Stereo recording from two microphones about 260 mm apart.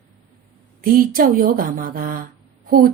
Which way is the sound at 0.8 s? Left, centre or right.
Right.